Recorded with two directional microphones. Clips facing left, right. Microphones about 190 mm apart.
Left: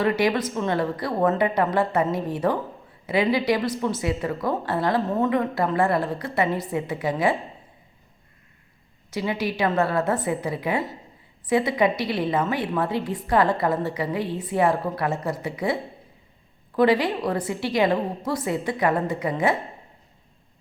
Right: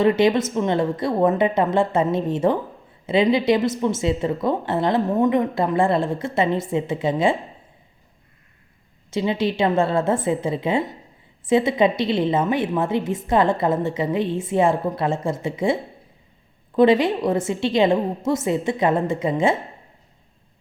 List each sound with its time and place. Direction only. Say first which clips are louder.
0.0 s a woman's voice: right 5 dB; 25° right (ahead or behind)
9.0 s a woman's voice: right 4 dB; 25° right (ahead or behind)